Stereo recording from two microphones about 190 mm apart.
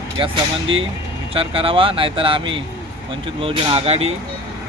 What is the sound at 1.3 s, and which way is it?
Speech, 30° right (ahead or behind).